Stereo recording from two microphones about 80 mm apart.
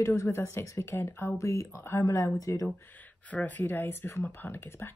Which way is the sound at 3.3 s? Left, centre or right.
Centre.